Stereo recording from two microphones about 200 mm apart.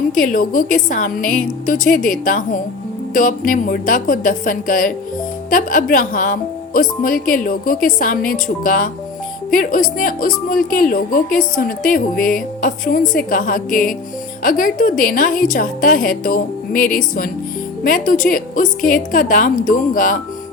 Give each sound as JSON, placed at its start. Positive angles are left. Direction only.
{"t": 0.1, "sound": "a woman's voice", "side_deg": 40}